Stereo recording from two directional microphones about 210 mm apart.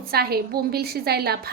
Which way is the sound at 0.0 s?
45° right (ahead or behind).